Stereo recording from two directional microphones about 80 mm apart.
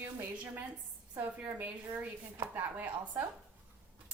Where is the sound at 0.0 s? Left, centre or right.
Right.